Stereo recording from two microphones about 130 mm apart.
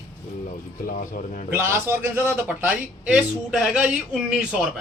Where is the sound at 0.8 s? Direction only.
85° left.